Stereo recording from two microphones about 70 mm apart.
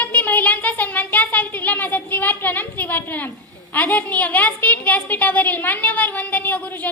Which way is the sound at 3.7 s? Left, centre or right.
Left.